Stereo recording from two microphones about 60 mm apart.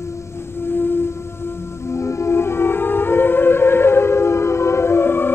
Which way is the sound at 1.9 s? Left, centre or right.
Left.